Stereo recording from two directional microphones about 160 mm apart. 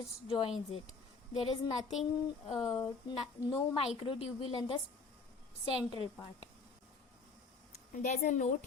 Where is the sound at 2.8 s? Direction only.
25° left (ahead or behind).